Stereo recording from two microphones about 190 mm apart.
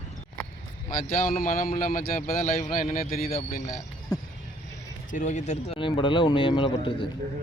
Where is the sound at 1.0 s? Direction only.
45° left (ahead or behind).